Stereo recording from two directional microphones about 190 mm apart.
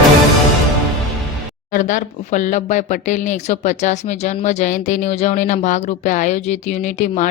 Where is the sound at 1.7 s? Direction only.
45° left (ahead or behind).